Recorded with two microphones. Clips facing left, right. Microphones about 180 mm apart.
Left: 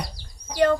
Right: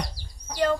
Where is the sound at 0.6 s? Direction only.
55° left (ahead or behind).